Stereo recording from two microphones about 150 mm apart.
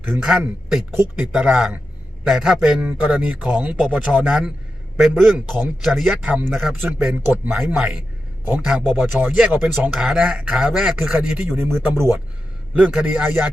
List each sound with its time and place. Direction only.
0.1 s speech: centre (ahead or behind)
6.8 s a man's voice: 15° right (ahead or behind)
11.5 s a man's voice: 15° right (ahead or behind)
12.7 s a man's voice: 5° right (ahead or behind)